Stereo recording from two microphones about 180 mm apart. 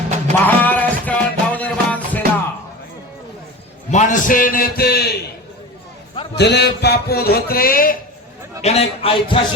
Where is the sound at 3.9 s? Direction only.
45° left (ahead or behind); by 5.1 s 60° left (ahead or behind).